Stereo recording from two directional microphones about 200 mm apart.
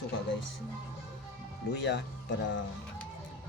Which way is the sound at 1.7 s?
55° left (ahead or behind).